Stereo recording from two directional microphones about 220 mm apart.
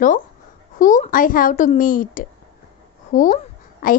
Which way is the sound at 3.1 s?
35° left (ahead or behind).